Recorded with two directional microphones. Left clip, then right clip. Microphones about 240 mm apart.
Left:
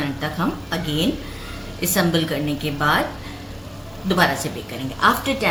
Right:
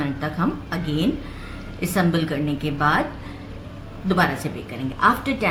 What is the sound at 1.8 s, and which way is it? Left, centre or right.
A woman's voice, right.